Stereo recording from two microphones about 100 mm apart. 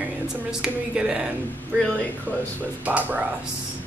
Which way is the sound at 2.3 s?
15° left (ahead or behind).